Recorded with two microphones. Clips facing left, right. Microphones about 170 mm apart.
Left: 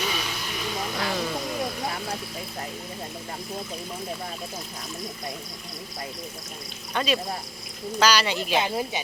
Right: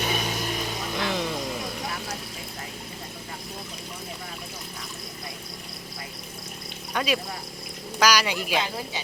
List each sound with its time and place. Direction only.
0.0 s vehicle: 45° right (ahead or behind)
0.9 s music: 20° right (ahead or behind)
6.9 s speech: 10° right (ahead or behind)
8.5 s speech: 20° left (ahead or behind)